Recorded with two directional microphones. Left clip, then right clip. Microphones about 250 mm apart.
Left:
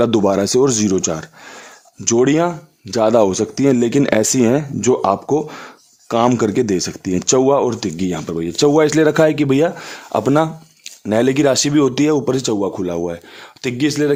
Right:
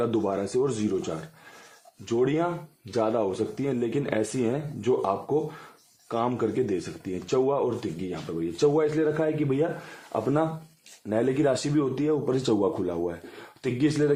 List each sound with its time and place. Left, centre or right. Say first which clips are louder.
0.0 s speech: left 12 dB; left